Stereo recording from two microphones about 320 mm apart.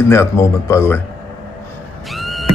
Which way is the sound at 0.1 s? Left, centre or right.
Centre.